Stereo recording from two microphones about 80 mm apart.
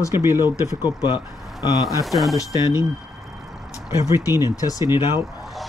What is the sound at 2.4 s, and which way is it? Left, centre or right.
Speech, left.